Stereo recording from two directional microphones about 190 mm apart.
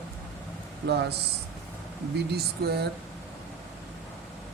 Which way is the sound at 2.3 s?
55° right (ahead or behind).